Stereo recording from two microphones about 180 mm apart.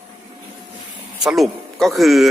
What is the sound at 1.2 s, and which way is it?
A man's voice, centre (ahead or behind).